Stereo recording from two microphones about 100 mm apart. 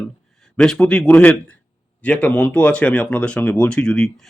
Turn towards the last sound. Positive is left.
turn(degrees=5)  # may be behind; listen again after turning